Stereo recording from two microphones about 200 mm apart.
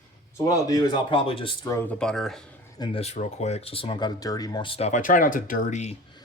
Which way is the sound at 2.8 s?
30° left (ahead or behind).